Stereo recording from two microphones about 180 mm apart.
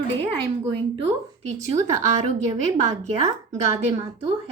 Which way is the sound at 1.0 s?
35° right (ahead or behind).